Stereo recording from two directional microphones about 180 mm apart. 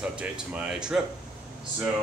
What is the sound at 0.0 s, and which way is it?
Speech, 5° right (ahead or behind).